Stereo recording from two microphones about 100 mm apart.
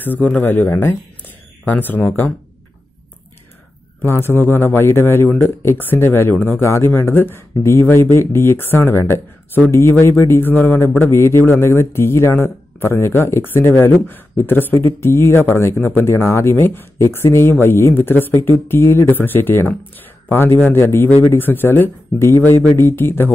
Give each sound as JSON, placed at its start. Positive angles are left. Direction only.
{"t": 0.0, "sound": "speech", "side_deg": 15}
{"t": 4.0, "sound": "speech", "side_deg": 25}